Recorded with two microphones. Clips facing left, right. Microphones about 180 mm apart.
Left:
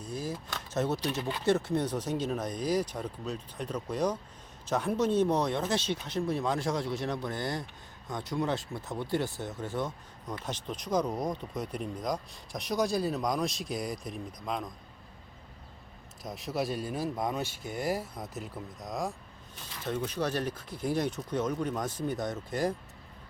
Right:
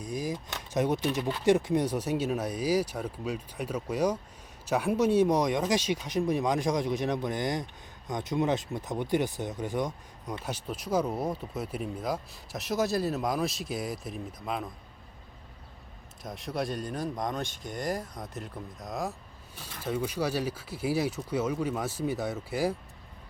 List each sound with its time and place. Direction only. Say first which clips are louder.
0.0 s a sound: right 3 dB; 15° right (ahead or behind)
0.5 s speech: right 3 dB; 15° right (ahead or behind)
16.2 s speech: even; centre (ahead or behind)